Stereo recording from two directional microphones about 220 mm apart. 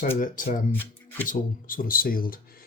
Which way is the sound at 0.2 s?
40° left (ahead or behind).